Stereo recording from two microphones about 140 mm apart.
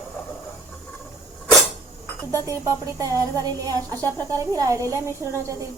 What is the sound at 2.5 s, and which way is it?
Speech, 20° right (ahead or behind).